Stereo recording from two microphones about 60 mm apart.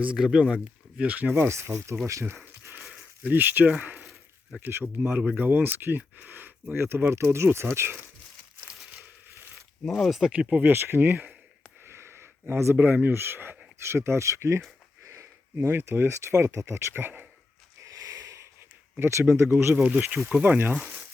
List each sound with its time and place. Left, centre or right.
0.0 s speech: centre
1.0 s speech: right
1.5 s speech: right
2.2 s speech: right
9.8 s speech: centre
10.3 s speech: right
10.7 s speech: right
11.9 s a sound: right
12.8 s speech: right
17.8 s a sound: right
18.9 s speech: right
19.9 s speech: right
20.7 s speech: centre